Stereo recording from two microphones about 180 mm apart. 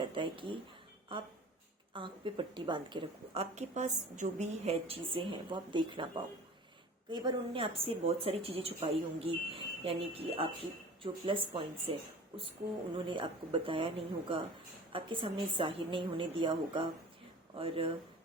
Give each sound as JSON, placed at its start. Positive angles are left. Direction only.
{"t": 0.0, "sound": "speech", "side_deg": -30}
{"t": 1.9, "sound": "speech", "side_deg": -25}